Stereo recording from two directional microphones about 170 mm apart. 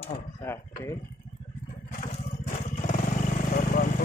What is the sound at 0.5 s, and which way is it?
Speech, 15° left (ahead or behind).